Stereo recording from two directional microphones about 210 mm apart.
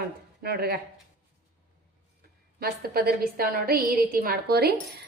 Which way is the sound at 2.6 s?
45° right (ahead or behind).